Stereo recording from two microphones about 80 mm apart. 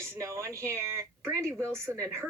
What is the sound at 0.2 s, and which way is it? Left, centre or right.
A woman's voice, right.